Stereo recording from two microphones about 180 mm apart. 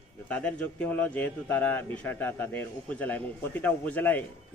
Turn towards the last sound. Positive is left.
turn(degrees=10)  # may be behind; listen again after turning